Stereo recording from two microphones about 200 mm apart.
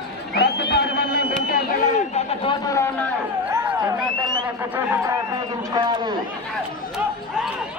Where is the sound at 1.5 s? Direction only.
35° left (ahead or behind).